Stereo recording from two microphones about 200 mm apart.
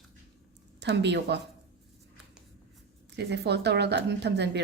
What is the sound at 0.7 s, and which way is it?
Speech, 60° right (ahead or behind).